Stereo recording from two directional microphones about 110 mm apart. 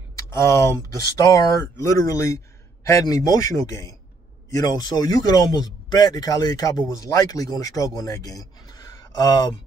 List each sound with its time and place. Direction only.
0.3 s speech: 25° left (ahead or behind)